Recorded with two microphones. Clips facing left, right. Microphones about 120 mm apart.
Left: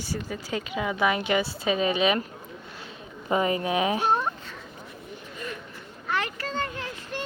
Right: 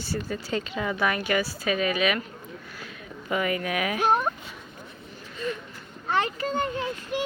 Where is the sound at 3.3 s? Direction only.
30° left (ahead or behind).